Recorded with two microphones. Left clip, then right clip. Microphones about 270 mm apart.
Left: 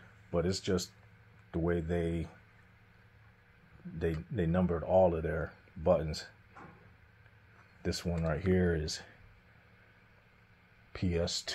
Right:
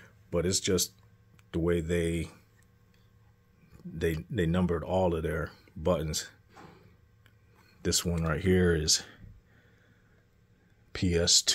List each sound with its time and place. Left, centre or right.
0.3 s speech: right
4.0 s speech: right
7.8 s speech: right
10.9 s speech: right